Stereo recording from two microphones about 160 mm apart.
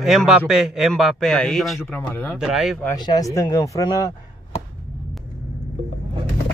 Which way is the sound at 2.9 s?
25° left (ahead or behind).